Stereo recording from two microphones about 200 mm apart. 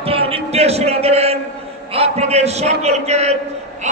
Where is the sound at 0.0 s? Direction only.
30° right (ahead or behind).